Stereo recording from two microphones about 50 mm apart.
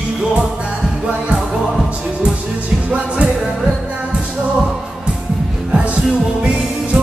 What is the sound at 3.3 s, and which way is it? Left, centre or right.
Music, centre.